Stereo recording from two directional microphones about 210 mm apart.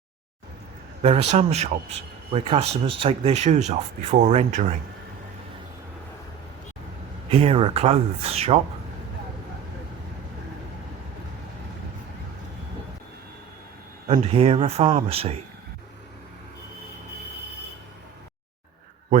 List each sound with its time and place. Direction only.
1.0 s speech: 30° right (ahead or behind)
7.3 s speech: 25° right (ahead or behind)
14.1 s speech: 30° right (ahead or behind)